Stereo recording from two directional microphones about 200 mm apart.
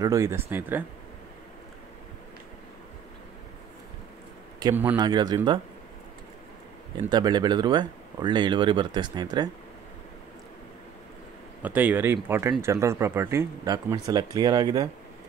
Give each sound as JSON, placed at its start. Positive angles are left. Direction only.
{"t": 0.0, "sound": "speech", "side_deg": -15}
{"t": 4.6, "sound": "a man's voice", "side_deg": -20}
{"t": 7.1, "sound": "speech", "side_deg": -20}
{"t": 11.6, "sound": "speech", "side_deg": -10}